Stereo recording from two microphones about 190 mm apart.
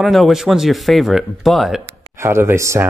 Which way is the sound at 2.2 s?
15° right (ahead or behind).